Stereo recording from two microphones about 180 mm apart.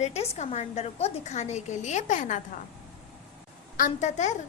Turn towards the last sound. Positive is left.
turn(degrees=40)  # may be behind; listen again after turning